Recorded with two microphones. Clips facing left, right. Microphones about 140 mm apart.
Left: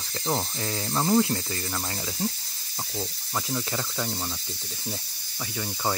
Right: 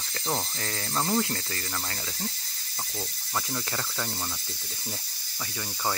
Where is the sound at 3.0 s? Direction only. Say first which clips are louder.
Left 2 dB; 10° left (ahead or behind).